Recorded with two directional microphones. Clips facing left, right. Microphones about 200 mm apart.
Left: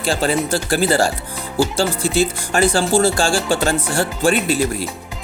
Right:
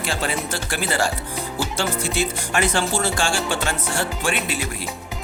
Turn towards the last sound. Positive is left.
turn(degrees=35)  # may be behind; listen again after turning